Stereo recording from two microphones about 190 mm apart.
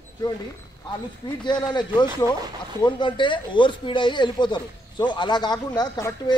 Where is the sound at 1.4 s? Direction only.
25° left (ahead or behind).